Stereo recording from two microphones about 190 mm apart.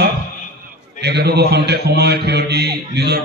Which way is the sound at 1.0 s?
55° right (ahead or behind).